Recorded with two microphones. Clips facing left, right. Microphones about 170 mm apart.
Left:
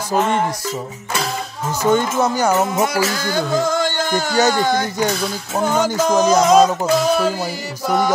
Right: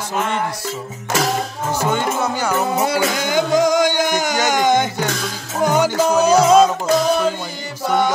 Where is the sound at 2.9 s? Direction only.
20° right (ahead or behind); by 6.7 s 5° right (ahead or behind).